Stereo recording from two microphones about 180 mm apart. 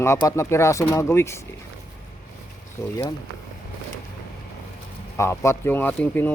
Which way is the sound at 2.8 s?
20° left (ahead or behind).